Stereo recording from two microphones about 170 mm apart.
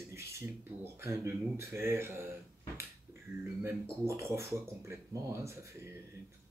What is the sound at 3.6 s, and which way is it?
Speech, 15° right (ahead or behind).